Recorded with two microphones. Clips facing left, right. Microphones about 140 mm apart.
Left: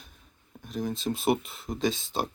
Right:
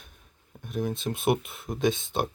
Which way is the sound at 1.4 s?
55° right (ahead or behind).